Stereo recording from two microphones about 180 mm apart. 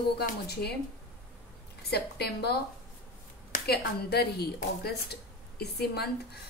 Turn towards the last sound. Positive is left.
turn(degrees=65)  # may be behind; listen again after turning